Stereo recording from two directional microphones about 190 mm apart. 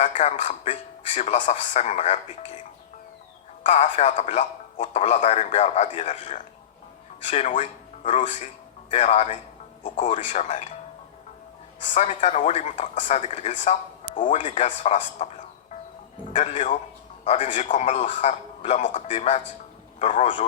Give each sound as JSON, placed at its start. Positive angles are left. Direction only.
{"t": 0.2, "sound": "speech", "side_deg": 40}
{"t": 3.7, "sound": "speech", "side_deg": 40}
{"t": 11.9, "sound": "speech", "side_deg": 40}